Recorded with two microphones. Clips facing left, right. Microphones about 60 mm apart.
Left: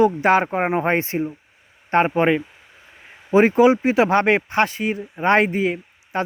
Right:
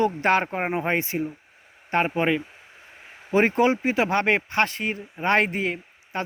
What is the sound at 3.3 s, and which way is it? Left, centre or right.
Speech, centre.